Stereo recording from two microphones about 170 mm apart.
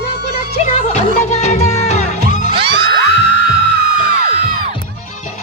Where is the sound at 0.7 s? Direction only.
40° left (ahead or behind).